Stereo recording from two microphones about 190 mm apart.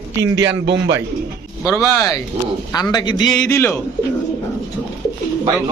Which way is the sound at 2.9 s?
25° left (ahead or behind).